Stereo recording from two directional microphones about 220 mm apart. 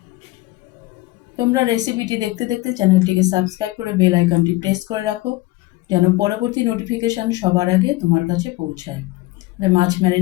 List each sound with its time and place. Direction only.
1.4 s speech: 15° right (ahead or behind)